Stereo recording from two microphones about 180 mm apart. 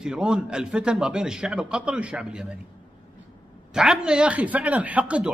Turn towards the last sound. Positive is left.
turn(degrees=-5)  # may be behind; listen again after turning